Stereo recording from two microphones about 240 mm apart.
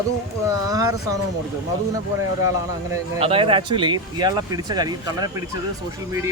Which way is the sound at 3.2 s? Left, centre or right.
Right.